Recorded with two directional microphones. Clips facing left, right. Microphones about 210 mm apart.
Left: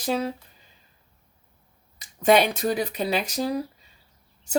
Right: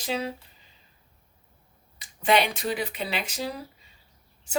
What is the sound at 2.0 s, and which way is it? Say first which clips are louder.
Speech: left 4 dB; 45° left (ahead or behind).